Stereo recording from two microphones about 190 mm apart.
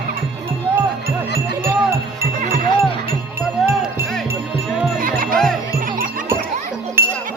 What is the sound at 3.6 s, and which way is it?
Music, centre (ahead or behind).